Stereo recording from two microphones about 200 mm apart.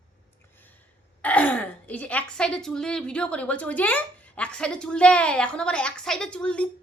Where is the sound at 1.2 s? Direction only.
5° left (ahead or behind).